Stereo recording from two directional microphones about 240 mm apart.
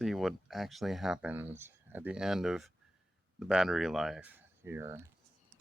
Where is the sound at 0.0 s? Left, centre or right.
Centre.